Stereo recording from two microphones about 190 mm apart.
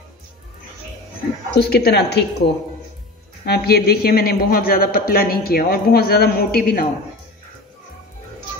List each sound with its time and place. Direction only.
1.5 s a woman's voice: 55° left (ahead or behind)
3.4 s a man's voice: 55° left (ahead or behind)